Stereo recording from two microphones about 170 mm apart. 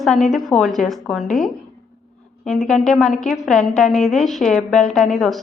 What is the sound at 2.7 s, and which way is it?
Speech, centre (ahead or behind).